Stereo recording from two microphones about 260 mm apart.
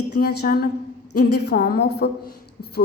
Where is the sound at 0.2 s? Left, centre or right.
Left.